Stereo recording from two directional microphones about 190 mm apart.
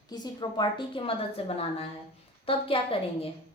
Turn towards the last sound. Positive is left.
turn(degrees=30)  # may be behind; listen again after turning